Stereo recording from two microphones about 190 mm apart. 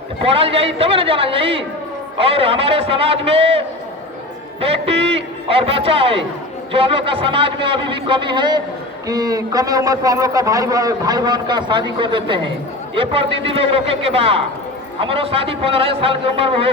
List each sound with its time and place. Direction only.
0.2 s a man's voice: 30° right (ahead or behind)
4.6 s a man's voice: 30° right (ahead or behind)